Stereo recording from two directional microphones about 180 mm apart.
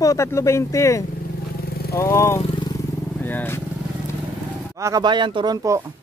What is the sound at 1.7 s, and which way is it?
Vehicle, 60° left (ahead or behind).